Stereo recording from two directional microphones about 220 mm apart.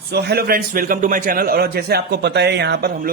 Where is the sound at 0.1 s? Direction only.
45° right (ahead or behind).